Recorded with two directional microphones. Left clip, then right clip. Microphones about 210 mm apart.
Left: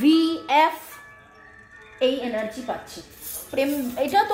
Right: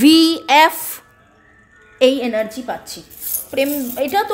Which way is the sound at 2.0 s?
50° right (ahead or behind).